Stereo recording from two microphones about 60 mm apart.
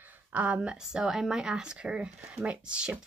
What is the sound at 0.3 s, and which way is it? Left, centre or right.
Speech, right.